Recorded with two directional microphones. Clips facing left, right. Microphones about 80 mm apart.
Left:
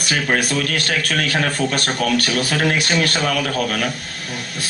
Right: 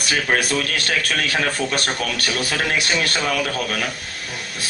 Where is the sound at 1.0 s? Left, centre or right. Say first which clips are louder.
Left 2 dB; left.